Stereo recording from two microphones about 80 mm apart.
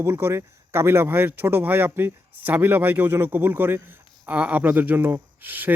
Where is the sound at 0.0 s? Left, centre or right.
Right.